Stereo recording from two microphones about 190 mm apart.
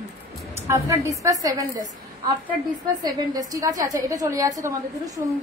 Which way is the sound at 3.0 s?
20° right (ahead or behind).